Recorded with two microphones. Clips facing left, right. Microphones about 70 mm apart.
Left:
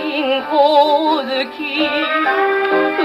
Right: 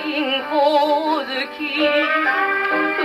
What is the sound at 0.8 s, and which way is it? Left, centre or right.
Music, left.